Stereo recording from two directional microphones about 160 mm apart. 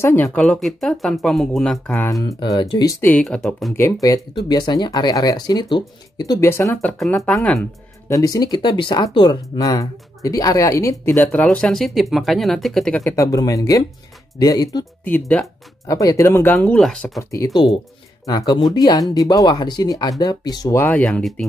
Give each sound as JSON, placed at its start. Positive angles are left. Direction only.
{"t": 0.0, "sound": "speech", "side_deg": 15}
{"t": 2.2, "sound": "speech", "side_deg": 20}
{"t": 3.7, "sound": "speech", "side_deg": 20}
{"t": 8.1, "sound": "speech", "side_deg": 20}
{"t": 13.0, "sound": "speech", "side_deg": 20}
{"t": 15.0, "sound": "speech", "side_deg": 10}
{"t": 15.9, "sound": "speech", "side_deg": 20}
{"t": 17.2, "sound": "speech", "side_deg": 20}
{"t": 20.8, "sound": "speech", "side_deg": 10}